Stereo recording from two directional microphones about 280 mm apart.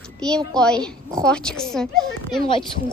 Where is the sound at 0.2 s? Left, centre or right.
Centre.